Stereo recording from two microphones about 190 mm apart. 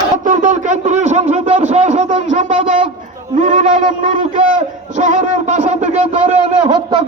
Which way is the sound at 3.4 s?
25° right (ahead or behind).